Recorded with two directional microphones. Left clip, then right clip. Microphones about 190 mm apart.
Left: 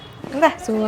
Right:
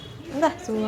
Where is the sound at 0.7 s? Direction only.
35° left (ahead or behind).